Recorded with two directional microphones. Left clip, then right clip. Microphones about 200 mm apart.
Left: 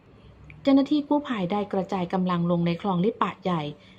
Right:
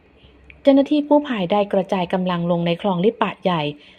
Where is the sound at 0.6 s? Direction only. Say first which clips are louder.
Right 7 dB; 10° right (ahead or behind).